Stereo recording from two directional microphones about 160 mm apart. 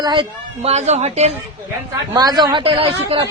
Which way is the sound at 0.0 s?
30° right (ahead or behind).